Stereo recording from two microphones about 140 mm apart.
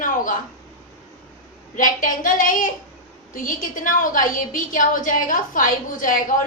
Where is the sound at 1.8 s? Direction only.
75° left (ahead or behind).